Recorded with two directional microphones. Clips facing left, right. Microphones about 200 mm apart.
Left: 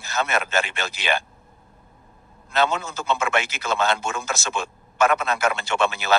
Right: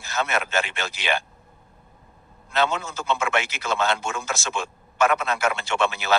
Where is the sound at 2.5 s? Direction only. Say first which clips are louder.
Left 1 dB; 40° left (ahead or behind).